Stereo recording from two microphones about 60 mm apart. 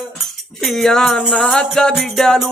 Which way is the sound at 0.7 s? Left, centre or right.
Centre.